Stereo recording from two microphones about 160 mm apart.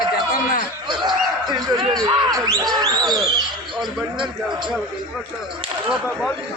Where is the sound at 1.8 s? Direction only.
30° right (ahead or behind).